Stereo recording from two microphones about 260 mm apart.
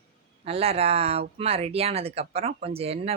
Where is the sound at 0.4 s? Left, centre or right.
Right.